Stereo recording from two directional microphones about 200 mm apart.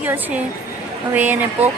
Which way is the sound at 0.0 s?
10° right (ahead or behind).